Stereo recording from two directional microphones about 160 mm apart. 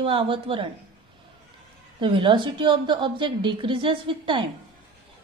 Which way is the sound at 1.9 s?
30° right (ahead or behind).